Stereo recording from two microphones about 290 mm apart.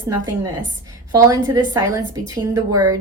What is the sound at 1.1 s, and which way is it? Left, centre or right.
A woman's voice, centre.